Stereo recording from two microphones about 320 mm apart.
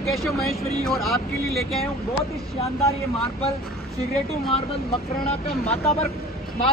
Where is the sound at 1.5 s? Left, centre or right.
Centre.